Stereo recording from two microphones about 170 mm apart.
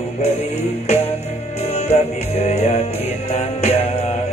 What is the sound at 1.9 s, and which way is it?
Music, 40° left (ahead or behind).